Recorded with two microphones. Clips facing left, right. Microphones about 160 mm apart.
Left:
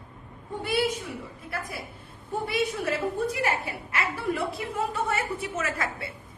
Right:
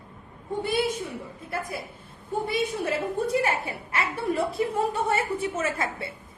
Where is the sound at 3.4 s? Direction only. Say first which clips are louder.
Right 1 dB; 25° right (ahead or behind).